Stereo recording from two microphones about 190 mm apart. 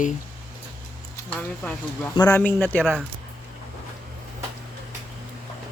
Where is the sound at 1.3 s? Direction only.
5° left (ahead or behind).